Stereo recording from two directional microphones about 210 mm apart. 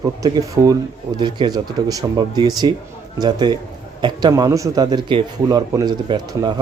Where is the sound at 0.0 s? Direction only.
15° right (ahead or behind).